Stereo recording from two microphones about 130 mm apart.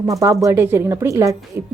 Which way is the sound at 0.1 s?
25° right (ahead or behind).